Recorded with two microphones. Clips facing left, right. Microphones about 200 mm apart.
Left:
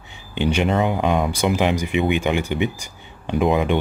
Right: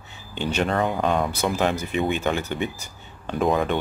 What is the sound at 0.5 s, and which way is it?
Speech, 15° left (ahead or behind).